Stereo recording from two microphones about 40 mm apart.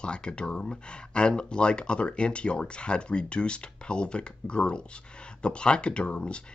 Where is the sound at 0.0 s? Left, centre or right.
Left.